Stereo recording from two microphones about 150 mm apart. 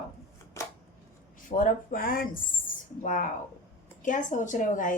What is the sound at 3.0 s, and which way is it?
A woman's voice, 55° left (ahead or behind).